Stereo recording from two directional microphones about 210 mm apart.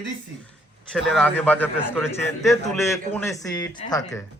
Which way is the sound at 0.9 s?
Centre (ahead or behind).